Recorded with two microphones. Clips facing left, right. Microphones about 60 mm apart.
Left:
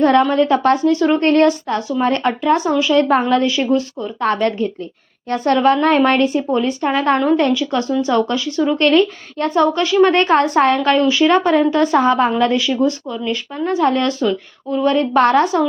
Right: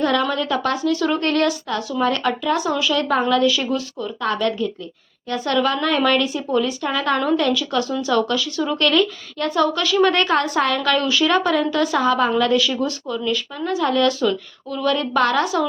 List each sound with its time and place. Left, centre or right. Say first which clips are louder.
0.0 s a woman's voice: left 7 dB; left
8.8 s a woman's voice: left 4 dB; left